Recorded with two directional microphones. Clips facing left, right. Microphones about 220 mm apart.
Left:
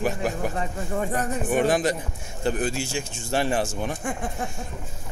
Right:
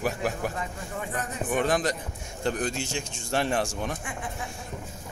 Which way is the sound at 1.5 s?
10° left (ahead or behind).